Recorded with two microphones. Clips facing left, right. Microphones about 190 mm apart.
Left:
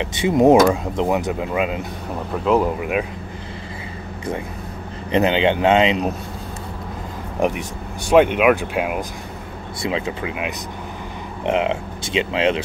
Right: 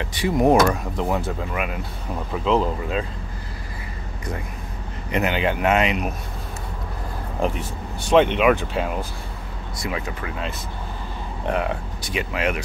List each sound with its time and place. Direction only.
0.0 s speech: 20° left (ahead or behind)
2.3 s speech: 10° left (ahead or behind)
5.1 s speech: 25° left (ahead or behind)
7.3 s speech: 15° left (ahead or behind)
9.8 s speech: 25° left (ahead or behind)